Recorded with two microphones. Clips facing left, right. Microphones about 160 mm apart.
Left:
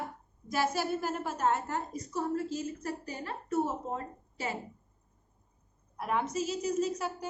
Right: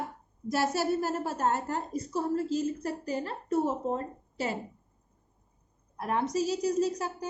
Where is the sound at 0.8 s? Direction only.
40° right (ahead or behind).